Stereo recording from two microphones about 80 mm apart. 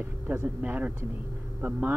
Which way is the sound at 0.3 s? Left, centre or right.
Right.